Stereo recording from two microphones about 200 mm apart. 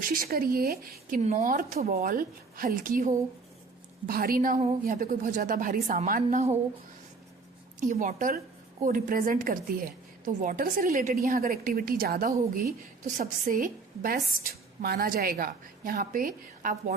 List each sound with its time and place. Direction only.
0.0 s a woman's voice: 45° right (ahead or behind)
1.2 s a woman's voice: 35° right (ahead or behind)
7.8 s a woman's voice: 40° right (ahead or behind)